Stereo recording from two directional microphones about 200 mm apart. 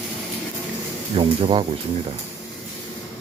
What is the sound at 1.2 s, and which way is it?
Speech, 25° right (ahead or behind).